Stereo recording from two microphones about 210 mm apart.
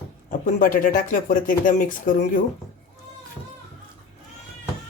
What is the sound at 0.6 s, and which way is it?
Speech, 40° left (ahead or behind).